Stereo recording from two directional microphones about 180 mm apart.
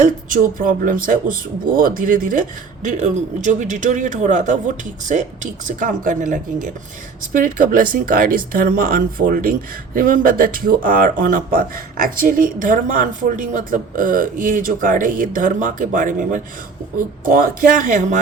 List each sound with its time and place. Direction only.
0.0 s speech: 50° right (ahead or behind)